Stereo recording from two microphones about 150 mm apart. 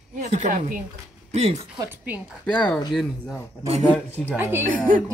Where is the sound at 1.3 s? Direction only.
45° right (ahead or behind).